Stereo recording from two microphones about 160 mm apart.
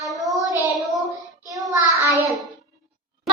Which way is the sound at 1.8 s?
20° right (ahead or behind).